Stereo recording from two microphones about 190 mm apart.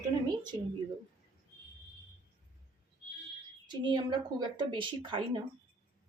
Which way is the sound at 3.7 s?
25° right (ahead or behind).